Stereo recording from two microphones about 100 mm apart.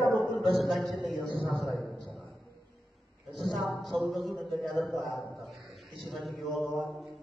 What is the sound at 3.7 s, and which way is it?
Speech, centre (ahead or behind).